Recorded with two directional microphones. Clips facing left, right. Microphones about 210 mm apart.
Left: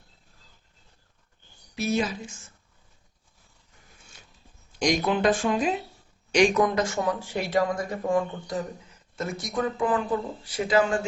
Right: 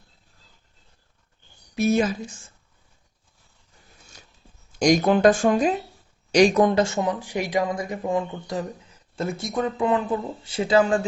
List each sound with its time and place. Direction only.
1.7 s speech: 50° right (ahead or behind)
4.8 s speech: 45° right (ahead or behind); by 10.8 s 30° right (ahead or behind)